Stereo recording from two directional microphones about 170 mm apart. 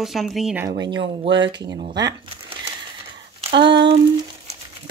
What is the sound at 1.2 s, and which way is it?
Speech, 90° right.